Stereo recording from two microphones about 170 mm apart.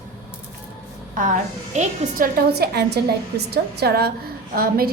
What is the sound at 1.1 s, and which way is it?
A woman's voice, 50° right (ahead or behind).